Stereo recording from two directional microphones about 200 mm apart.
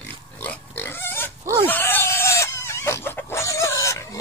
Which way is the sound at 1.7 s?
10° left (ahead or behind).